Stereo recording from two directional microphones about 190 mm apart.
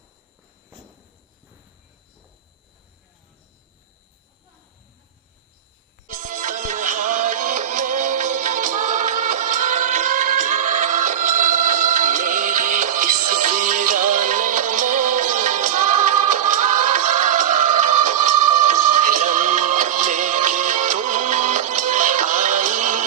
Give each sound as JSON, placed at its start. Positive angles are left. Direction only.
{"t": 6.1, "sound": "music", "side_deg": -40}